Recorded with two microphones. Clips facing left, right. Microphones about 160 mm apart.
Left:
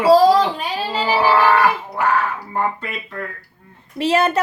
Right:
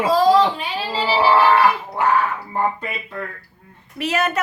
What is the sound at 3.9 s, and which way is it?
Speech, 30° left (ahead or behind).